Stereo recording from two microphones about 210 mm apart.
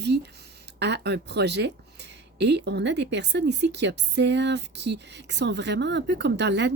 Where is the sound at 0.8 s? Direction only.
55° right (ahead or behind).